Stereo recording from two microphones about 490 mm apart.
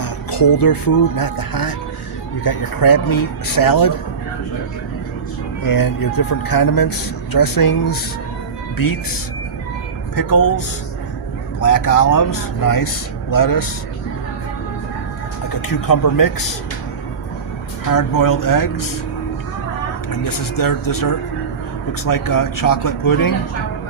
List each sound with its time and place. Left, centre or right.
0.0 s music: left
2.4 s speech: left
5.6 s speech: left
10.2 s speech: left
11.6 s speech: left
15.6 s speech: left
17.9 s speech: left
20.6 s speech: left